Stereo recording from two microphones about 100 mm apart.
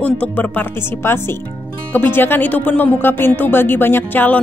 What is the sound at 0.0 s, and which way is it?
A woman's voice, 15° left (ahead or behind).